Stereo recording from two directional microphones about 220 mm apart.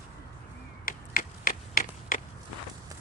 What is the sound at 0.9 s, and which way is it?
Finger snapping, 40° left (ahead or behind).